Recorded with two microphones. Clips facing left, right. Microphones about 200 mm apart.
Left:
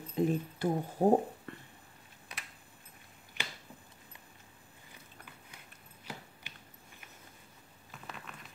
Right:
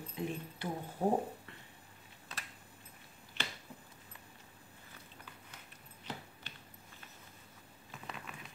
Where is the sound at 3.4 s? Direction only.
15° left (ahead or behind).